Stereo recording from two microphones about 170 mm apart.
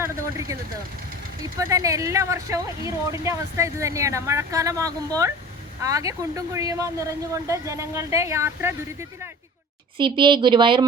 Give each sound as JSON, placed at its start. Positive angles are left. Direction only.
{"t": 0.0, "sound": "vehicle", "side_deg": -15}
{"t": 1.5, "sound": "speech", "side_deg": -20}
{"t": 10.0, "sound": "a woman's voice", "side_deg": -30}